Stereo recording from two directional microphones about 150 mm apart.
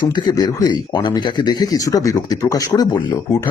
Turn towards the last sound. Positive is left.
turn(degrees=25)  # may be behind; listen again after turning